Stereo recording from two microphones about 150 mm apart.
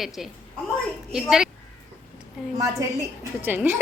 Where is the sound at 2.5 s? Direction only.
20° right (ahead or behind).